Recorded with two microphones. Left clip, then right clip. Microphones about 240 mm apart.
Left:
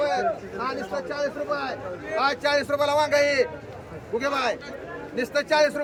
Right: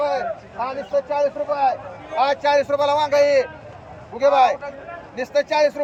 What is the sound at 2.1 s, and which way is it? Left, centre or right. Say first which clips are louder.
A man's voice: right 5 dB; centre.